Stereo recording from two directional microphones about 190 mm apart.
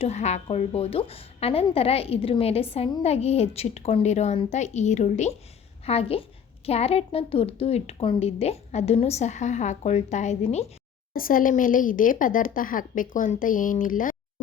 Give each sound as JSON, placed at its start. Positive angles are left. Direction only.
{"t": 0.0, "sound": "a woman's voice", "side_deg": 35}
{"t": 11.1, "sound": "speech", "side_deg": 50}